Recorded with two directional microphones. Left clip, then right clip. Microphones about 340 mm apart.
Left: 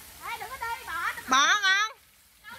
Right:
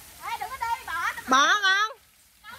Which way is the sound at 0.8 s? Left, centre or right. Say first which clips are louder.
Right 2 dB; centre.